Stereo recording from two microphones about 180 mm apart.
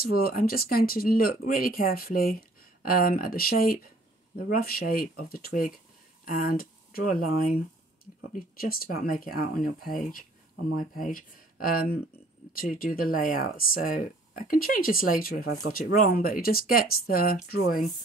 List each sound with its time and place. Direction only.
0.0 s speech: 55° left (ahead or behind)